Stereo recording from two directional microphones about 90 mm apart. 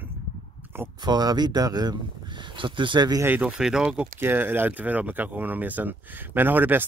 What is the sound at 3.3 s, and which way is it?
Speech, 20° right (ahead or behind).